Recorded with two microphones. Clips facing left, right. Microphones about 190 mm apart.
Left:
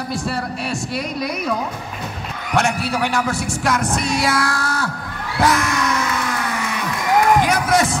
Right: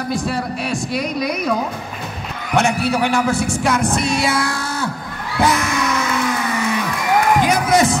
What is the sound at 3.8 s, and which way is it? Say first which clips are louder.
Music: right 2 dB; 25° right (ahead or behind).